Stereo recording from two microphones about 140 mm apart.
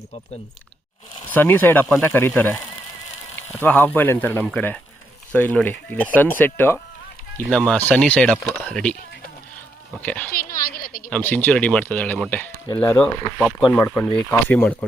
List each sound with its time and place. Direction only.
1.3 s speech: 15° left (ahead or behind)
10.0 s speech: 10° left (ahead or behind)
10.3 s a sound: 90° left
11.1 s speech: 15° left (ahead or behind)
13.0 s speech: 5° left (ahead or behind)
13.7 s speech: 20° left (ahead or behind)